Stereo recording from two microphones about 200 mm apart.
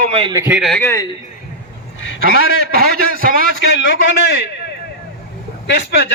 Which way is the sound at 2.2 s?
50° right (ahead or behind).